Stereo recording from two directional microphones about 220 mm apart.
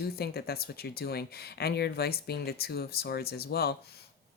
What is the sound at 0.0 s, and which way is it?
Speech, 45° left (ahead or behind).